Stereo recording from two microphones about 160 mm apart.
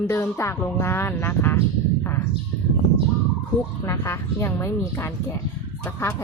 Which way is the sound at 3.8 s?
15° left (ahead or behind).